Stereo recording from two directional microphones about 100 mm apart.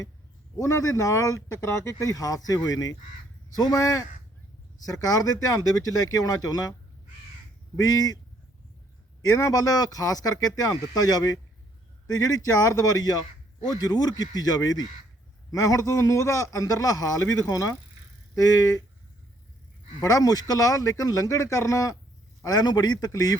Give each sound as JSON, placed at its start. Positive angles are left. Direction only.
{"t": 0.6, "sound": "speech", "side_deg": 35}
{"t": 7.8, "sound": "speech", "side_deg": 40}
{"t": 9.2, "sound": "speech", "side_deg": 30}
{"t": 20.0, "sound": "speech", "side_deg": 35}